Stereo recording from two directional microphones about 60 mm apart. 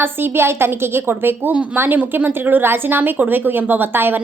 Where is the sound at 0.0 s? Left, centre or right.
Right.